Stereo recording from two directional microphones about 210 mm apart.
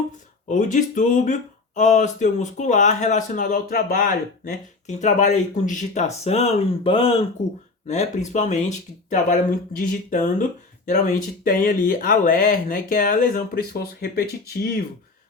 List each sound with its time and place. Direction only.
0.4 s speech: 35° left (ahead or behind)